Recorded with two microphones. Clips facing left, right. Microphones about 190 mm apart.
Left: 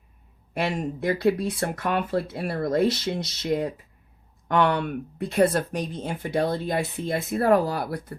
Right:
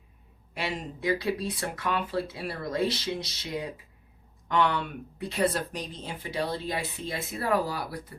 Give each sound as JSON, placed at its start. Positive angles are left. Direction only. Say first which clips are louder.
{"t": 0.5, "sound": "speech", "louder": "left 7 dB", "side_deg": 50}